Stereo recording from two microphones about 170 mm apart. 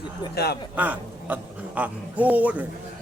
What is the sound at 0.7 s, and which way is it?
Speech, 10° right (ahead or behind).